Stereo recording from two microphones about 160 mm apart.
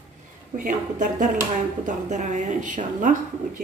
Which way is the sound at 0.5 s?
55° right (ahead or behind).